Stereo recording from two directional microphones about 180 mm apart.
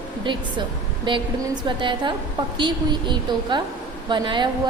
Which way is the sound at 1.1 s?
25° right (ahead or behind).